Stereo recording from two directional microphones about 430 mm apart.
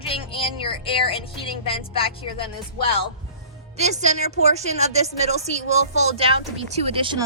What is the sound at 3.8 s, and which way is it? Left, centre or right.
A woman's voice, centre.